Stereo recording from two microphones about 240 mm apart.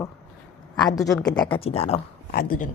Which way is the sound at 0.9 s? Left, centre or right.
Centre.